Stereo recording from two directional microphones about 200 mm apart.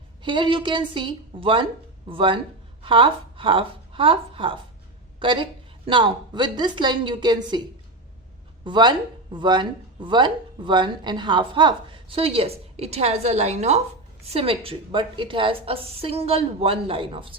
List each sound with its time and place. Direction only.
0.2 s speech: 25° right (ahead or behind)
8.6 s speech: 25° right (ahead or behind)